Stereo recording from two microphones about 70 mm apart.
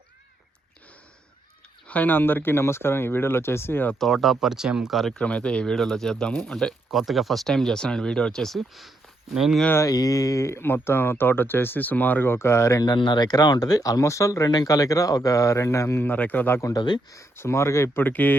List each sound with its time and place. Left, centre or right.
1.9 s speech: left
4.0 s speech: centre
5.2 s speech: centre
9.7 s speech: left
12.8 s speech: left
14.5 s speech: left
16.0 s speech: left
16.7 s speech: left
17.3 s speech: left
18.0 s speech: left